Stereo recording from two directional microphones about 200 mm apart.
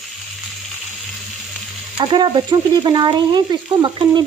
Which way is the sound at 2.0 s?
20° right (ahead or behind).